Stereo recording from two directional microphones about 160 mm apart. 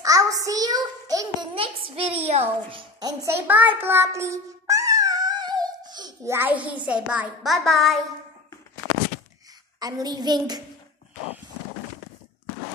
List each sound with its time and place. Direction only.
0.0 s a sound: 20° right (ahead or behind)
1.5 s a child's voice: 35° right (ahead or behind)
3.0 s a child's voice: 20° right (ahead or behind); by 8.0 s centre (ahead or behind)
9.8 s a child's voice: 25° right (ahead or behind)